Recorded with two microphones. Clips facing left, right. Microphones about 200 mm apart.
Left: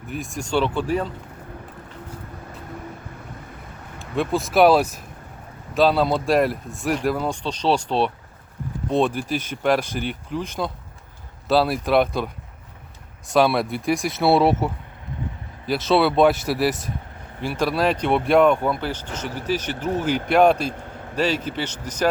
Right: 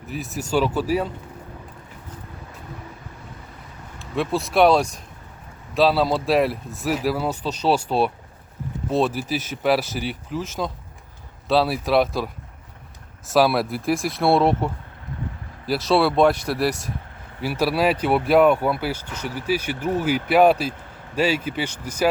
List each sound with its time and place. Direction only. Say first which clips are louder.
0.1 s speech: right 1 dB; 5° right (ahead or behind)
3.9 s speech: left 1 dB; centre (ahead or behind)